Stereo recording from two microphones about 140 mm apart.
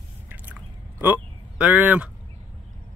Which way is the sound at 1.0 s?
10° right (ahead or behind).